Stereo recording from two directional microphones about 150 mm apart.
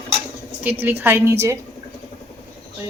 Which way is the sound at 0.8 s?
15° right (ahead or behind).